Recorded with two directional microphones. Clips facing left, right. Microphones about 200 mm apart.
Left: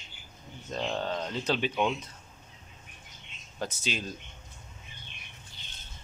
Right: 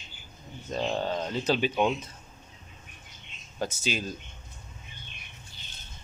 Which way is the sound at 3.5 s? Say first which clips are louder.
Right 3 dB; centre (ahead or behind).